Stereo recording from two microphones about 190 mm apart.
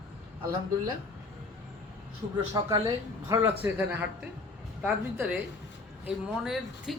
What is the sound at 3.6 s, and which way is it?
Speech, 10° right (ahead or behind).